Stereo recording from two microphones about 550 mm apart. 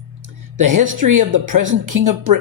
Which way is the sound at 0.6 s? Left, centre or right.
Right.